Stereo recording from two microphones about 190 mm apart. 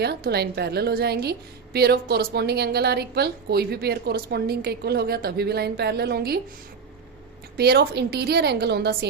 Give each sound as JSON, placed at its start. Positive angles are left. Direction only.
{"t": 0.0, "sound": "a woman's voice", "side_deg": -55}
{"t": 7.5, "sound": "a woman's voice", "side_deg": -55}